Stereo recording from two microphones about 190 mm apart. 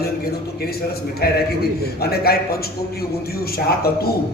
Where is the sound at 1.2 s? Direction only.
55° left (ahead or behind).